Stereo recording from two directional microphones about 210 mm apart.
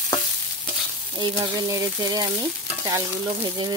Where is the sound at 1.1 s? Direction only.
20° right (ahead or behind).